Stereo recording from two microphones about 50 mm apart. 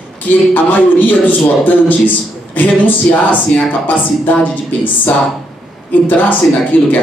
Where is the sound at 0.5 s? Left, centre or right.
Left.